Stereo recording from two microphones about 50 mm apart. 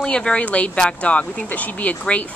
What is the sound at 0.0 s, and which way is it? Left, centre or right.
A woman's voice, centre.